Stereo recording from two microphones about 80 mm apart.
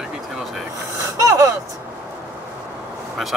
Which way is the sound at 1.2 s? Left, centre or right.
Right.